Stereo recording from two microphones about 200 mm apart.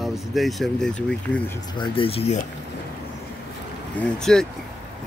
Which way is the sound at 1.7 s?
25° left (ahead or behind).